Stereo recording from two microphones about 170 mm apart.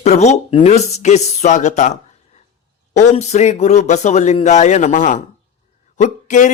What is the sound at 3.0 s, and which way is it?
A man's voice, 40° left (ahead or behind).